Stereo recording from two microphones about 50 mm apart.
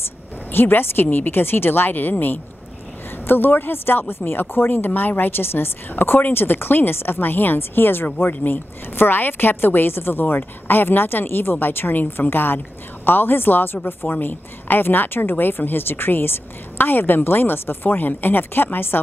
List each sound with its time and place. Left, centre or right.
0.5 s speech: left